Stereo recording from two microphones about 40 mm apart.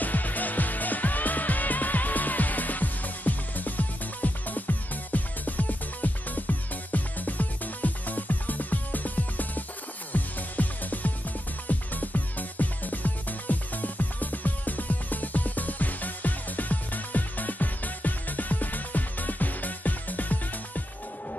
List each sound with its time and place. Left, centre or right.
0.0 s music: left